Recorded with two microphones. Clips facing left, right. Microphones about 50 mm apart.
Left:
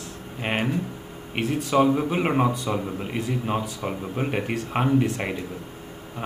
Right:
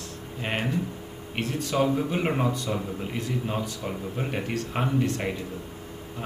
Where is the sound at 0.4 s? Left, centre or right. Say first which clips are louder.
Left 4 dB; centre.